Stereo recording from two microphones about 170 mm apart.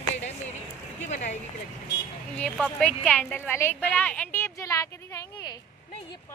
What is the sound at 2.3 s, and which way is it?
A woman's voice, 5° left (ahead or behind).